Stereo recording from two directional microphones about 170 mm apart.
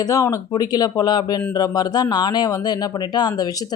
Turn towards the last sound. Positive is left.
turn(degrees=20)  # may be behind; listen again after turning